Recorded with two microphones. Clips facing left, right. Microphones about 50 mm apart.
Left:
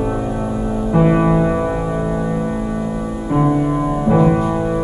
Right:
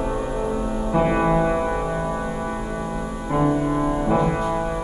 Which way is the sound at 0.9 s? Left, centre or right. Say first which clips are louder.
Left 5 dB; centre.